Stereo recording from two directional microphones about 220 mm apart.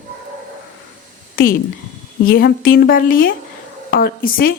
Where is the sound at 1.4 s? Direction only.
40° left (ahead or behind).